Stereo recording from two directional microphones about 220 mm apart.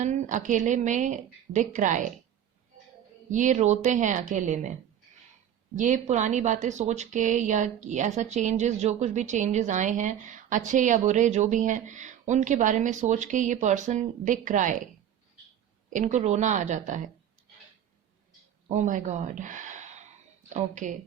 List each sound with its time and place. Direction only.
0.0 s speech: 35° right (ahead or behind)
3.2 s speech: 35° right (ahead or behind)
15.9 s speech: 35° right (ahead or behind)
18.7 s speech: 35° right (ahead or behind)